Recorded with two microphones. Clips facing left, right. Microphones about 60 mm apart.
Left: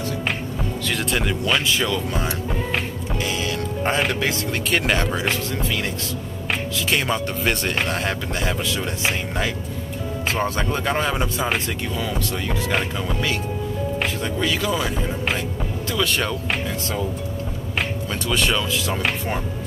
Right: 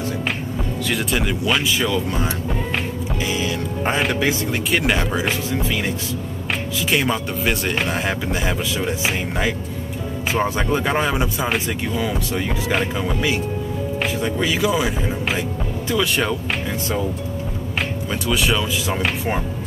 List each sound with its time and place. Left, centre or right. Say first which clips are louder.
0.8 s speech: right 1 dB; centre
3.3 s speech: right 2 dB; centre
6.9 s speech: right 2 dB; centre
15.9 s speech: right 3 dB; centre
18.3 s speech: right 1 dB; centre